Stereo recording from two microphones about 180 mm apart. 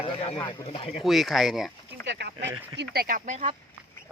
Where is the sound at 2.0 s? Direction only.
70° right (ahead or behind); by 3.5 s 45° right (ahead or behind).